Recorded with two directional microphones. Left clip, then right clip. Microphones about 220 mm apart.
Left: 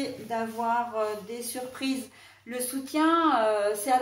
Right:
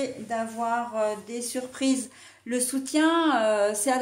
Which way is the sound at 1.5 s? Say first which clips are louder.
Right 6 dB; 45° right (ahead or behind).